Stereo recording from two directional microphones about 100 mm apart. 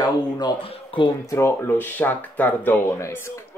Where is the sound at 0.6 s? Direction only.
70° left (ahead or behind).